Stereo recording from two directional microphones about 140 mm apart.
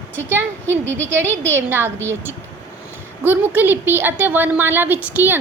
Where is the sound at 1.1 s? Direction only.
15° right (ahead or behind).